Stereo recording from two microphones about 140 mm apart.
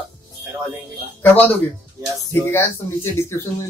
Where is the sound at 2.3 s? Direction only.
15° left (ahead or behind).